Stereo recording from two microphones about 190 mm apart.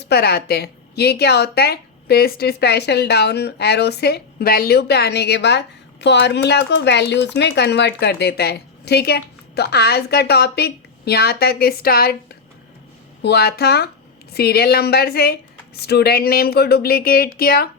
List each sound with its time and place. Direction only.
0.0 s a woman's voice: 60° left (ahead or behind)